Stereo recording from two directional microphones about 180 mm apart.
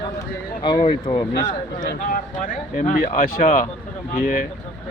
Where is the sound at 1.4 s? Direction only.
45° left (ahead or behind).